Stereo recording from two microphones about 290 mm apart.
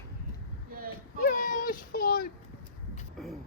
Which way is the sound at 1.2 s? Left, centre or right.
Left.